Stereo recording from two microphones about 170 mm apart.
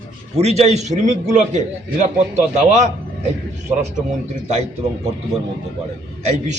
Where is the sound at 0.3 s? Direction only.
40° right (ahead or behind).